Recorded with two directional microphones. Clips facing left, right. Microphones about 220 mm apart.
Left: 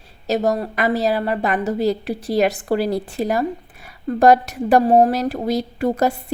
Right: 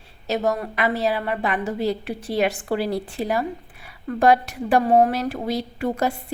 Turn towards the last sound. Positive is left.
turn(degrees=40)  # may be behind; listen again after turning